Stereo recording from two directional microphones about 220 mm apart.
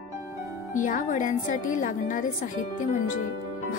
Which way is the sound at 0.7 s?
35° left (ahead or behind).